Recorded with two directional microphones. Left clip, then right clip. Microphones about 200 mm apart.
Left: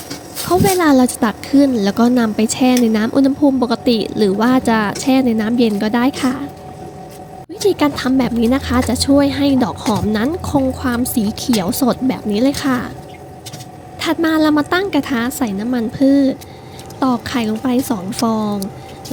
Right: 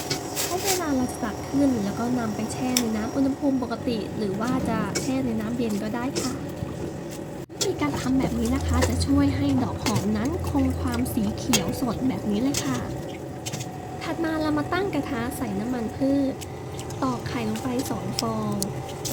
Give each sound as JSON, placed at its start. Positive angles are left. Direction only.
{"t": 0.8, "sound": "speech", "side_deg": 50}
{"t": 7.8, "sound": "speech", "side_deg": 45}
{"t": 14.0, "sound": "speech", "side_deg": 40}